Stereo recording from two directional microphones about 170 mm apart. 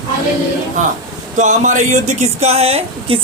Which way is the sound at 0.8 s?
45° right (ahead or behind).